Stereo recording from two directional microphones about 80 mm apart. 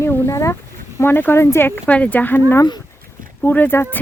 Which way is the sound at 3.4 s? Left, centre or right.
Left.